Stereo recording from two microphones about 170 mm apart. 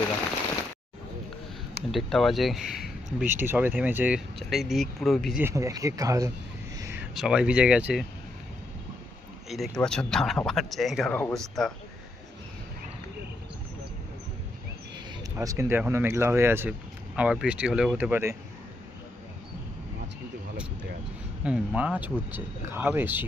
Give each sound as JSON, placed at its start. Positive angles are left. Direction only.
{"t": 1.9, "sound": "speech", "side_deg": 0}
{"t": 3.2, "sound": "speech", "side_deg": -10}
{"t": 4.4, "sound": "speech", "side_deg": 0}
{"t": 5.4, "sound": "speech", "side_deg": -15}
{"t": 6.7, "sound": "a sound", "side_deg": -15}
{"t": 7.2, "sound": "speech", "side_deg": -5}
{"t": 9.5, "sound": "speech", "side_deg": 0}
{"t": 15.4, "sound": "speech", "side_deg": -15}
{"t": 21.4, "sound": "speech", "side_deg": -5}